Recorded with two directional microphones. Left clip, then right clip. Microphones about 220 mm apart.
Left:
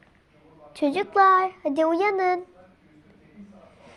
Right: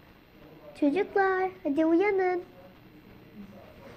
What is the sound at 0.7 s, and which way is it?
A child's voice, 45° left (ahead or behind).